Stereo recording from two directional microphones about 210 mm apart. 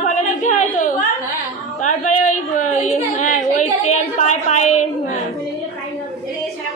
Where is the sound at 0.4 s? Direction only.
35° left (ahead or behind).